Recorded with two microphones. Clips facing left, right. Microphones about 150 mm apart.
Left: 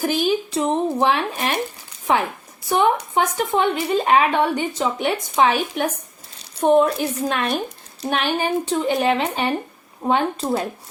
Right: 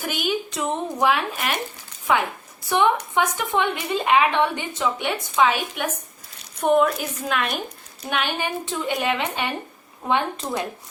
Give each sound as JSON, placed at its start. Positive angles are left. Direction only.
{"t": 0.0, "sound": "speech", "side_deg": 30}